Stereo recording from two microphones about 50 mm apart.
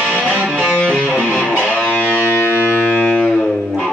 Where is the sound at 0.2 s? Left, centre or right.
Right.